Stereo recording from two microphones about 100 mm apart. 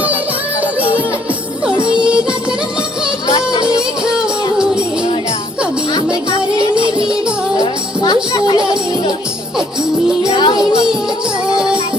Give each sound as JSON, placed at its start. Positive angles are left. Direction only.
{"t": 2.0, "sound": "music", "side_deg": -10}
{"t": 3.8, "sound": "music", "side_deg": -10}
{"t": 6.9, "sound": "music", "side_deg": -10}
{"t": 7.6, "sound": "music", "side_deg": 40}
{"t": 8.5, "sound": "music", "side_deg": -55}
{"t": 10.3, "sound": "music", "side_deg": 50}
{"t": 10.6, "sound": "music", "side_deg": -5}